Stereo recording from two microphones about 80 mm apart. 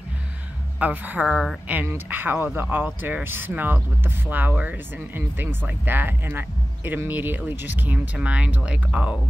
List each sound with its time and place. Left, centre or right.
0.7 s speech: centre